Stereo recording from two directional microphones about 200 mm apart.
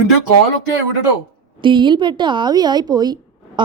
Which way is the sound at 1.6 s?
25° right (ahead or behind).